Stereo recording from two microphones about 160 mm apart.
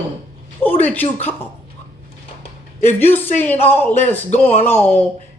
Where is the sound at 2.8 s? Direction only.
15° left (ahead or behind).